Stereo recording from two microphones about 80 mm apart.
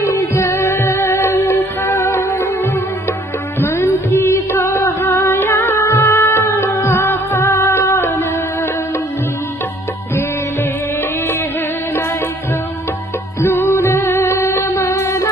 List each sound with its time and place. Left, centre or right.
0.0 s music: left
13.4 s music: left